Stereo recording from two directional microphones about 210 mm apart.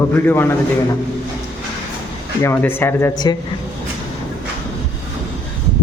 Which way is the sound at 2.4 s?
10° left (ahead or behind).